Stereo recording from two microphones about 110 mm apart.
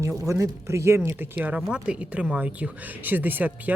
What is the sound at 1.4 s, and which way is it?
Speech, 10° right (ahead or behind).